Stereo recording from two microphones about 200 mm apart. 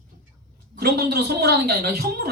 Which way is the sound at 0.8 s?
50° right (ahead or behind).